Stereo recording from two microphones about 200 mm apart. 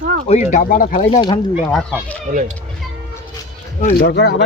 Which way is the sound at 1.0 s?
20° left (ahead or behind).